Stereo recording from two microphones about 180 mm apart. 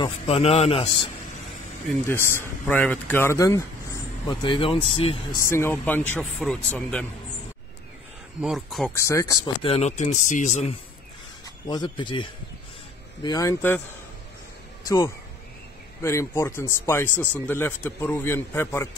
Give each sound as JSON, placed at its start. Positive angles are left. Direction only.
{"t": 0.0, "sound": "speech", "side_deg": 35}
{"t": 2.0, "sound": "a man's voice", "side_deg": 15}
{"t": 4.3, "sound": "speech", "side_deg": 25}
{"t": 5.4, "sound": "a man's voice", "side_deg": 15}
{"t": 8.4, "sound": "speech", "side_deg": 0}
{"t": 8.9, "sound": "speech", "side_deg": 15}
{"t": 9.7, "sound": "speech", "side_deg": 40}
{"t": 11.6, "sound": "a man's voice", "side_deg": 25}
{"t": 14.9, "sound": "a man's voice", "side_deg": 15}